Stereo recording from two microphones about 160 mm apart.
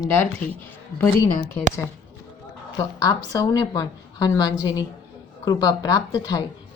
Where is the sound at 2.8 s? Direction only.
25° left (ahead or behind).